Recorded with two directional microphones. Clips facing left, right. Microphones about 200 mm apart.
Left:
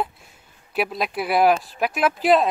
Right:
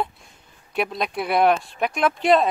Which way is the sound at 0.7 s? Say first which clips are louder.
Even; 5° left (ahead or behind).